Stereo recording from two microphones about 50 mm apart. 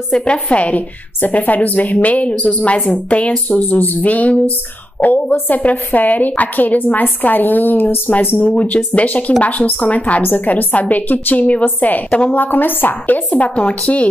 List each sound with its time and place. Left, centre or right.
0.1 s a woman's voice: left
8.5 s a woman's voice: left